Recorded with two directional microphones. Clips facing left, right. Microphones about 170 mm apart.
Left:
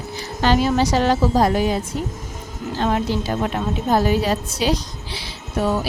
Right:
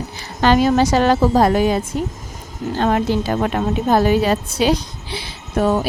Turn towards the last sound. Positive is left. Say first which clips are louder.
# right 4 dB
turn(degrees=-50)  # may be behind; listen again after turning